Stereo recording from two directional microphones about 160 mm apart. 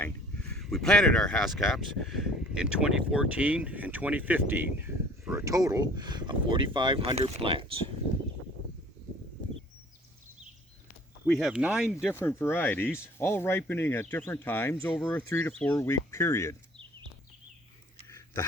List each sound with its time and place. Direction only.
0.5 s speech: 5° left (ahead or behind); by 7.8 s 35° right (ahead or behind)
11.3 s speech: 5° right (ahead or behind)
12.1 s speech: 15° left (ahead or behind)
14.9 s speech: centre (ahead or behind)
15.3 s speech: 15° left (ahead or behind)